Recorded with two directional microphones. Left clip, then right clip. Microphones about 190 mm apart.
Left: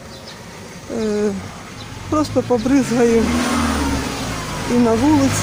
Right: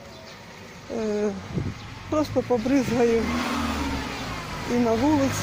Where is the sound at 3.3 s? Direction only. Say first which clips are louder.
Left 8 dB; 20° right (ahead or behind).